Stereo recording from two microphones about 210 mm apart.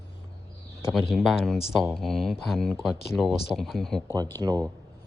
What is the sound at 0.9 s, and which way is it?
Speech, centre (ahead or behind).